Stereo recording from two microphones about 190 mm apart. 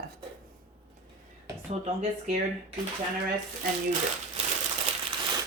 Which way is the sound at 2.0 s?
35° right (ahead or behind).